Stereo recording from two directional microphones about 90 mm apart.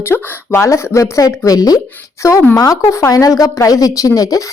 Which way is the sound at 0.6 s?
35° left (ahead or behind).